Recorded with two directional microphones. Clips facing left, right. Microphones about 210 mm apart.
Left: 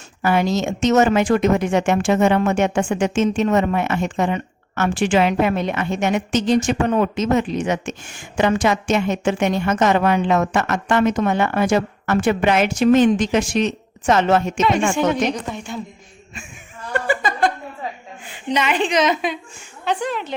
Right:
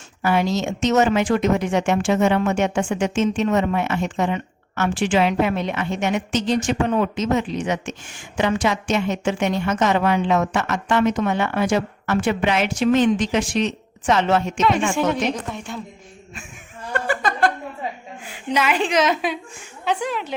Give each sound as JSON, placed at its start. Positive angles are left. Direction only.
{"t": 0.2, "sound": "a woman's voice", "side_deg": 50}
{"t": 14.9, "sound": "a woman's voice", "side_deg": 0}
{"t": 16.9, "sound": "laughter", "side_deg": 0}
{"t": 18.3, "sound": "a woman's voice", "side_deg": -5}